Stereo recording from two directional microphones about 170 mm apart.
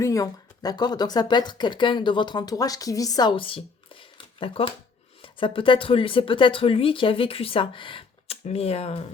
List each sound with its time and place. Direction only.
0.0 s speech: 20° left (ahead or behind); by 9.0 s 35° left (ahead or behind)